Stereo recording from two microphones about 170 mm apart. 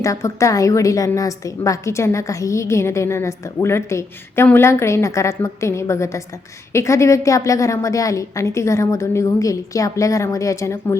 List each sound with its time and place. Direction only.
0.0 s a woman's voice: 20° left (ahead or behind)